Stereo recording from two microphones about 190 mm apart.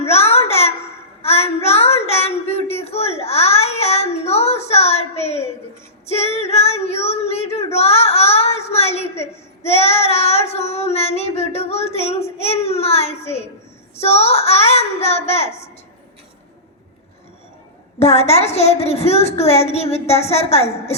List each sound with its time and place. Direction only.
0.0 s a sound: 35° left (ahead or behind)
1.2 s child singing: 35° left (ahead or behind)
13.9 s a woman's voice: 35° left (ahead or behind)
18.0 s a woman's voice: 35° left (ahead or behind)